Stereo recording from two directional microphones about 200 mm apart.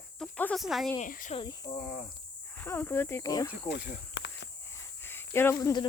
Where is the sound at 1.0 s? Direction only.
40° left (ahead or behind).